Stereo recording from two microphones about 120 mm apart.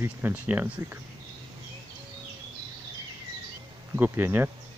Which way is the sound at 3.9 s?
15° right (ahead or behind).